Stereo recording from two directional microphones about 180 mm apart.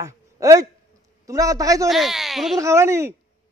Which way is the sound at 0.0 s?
20° right (ahead or behind).